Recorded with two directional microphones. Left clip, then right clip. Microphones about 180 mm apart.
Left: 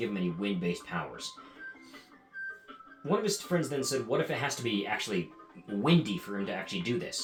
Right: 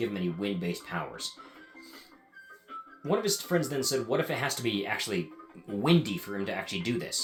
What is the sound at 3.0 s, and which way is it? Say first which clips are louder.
Speech: right 1 dB; 45° right (ahead or behind).